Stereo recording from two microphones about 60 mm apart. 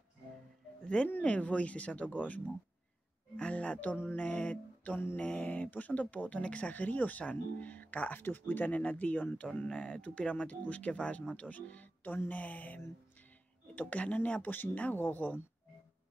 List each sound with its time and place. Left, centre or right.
1.0 s speech: left
4.9 s speech: left